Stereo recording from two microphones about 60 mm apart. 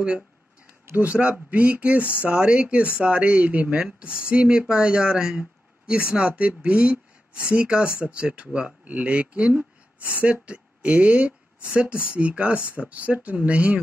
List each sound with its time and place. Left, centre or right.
0.9 s speech: right